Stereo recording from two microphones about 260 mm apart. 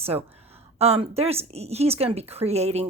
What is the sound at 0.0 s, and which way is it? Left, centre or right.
Speech, right.